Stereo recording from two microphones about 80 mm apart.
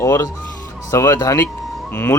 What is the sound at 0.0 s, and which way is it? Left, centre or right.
Speech, left.